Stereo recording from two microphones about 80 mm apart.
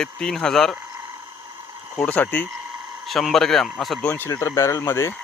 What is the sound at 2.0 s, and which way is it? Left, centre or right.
Speech, left.